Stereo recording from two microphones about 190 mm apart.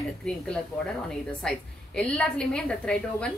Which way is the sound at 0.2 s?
5° left (ahead or behind).